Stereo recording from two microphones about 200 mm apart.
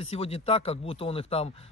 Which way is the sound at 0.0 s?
30° left (ahead or behind).